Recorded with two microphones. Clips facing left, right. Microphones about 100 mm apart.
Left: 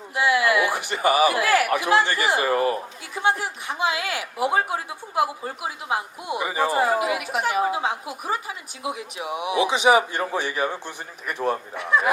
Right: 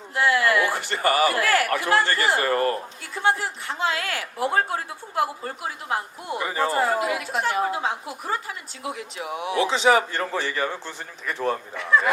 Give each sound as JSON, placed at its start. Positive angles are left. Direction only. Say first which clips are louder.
{"t": 0.1, "sound": "a man's voice", "louder": "even", "side_deg": 15}